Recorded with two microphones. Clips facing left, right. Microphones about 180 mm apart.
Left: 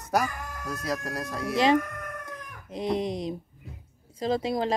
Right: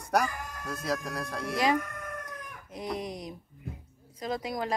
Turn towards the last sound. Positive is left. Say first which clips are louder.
# left 6 dB
turn(degrees=25)  # may be behind; listen again after turning